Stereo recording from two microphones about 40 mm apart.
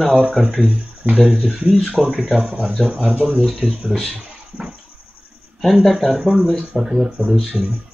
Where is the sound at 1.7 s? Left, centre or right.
Centre.